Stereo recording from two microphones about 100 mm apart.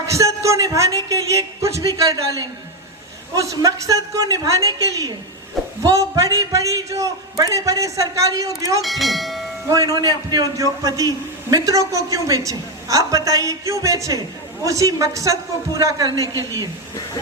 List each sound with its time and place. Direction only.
0.0 s a man's voice: 30° right (ahead or behind)
8.8 s speech: centre (ahead or behind)
9.6 s a man's voice: 35° right (ahead or behind)